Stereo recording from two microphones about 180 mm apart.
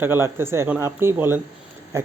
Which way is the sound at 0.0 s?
10° right (ahead or behind).